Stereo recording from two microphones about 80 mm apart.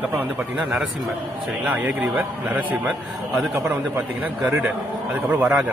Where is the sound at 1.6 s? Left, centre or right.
Right.